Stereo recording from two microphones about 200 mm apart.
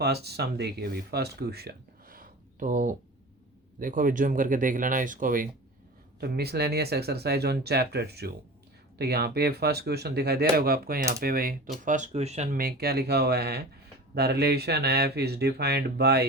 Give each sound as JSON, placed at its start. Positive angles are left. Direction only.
{"t": 0.0, "sound": "speech", "side_deg": -55}